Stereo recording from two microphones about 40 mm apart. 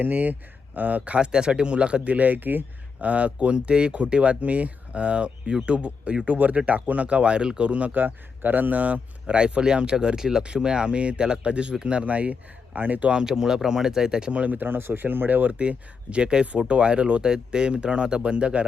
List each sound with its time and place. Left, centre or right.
0.0 s speech: right
1.2 s speech: right
2.1 s speech: right
3.0 s speech: right
7.7 s speech: right
7.9 s speech: right
13.2 s speech: centre
14.4 s speech: right
15.5 s speech: right